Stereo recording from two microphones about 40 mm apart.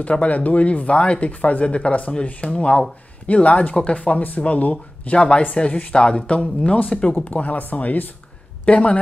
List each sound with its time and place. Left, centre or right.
0.0 s speech: left
5.1 s speech: left
7.2 s speech: left
8.6 s speech: left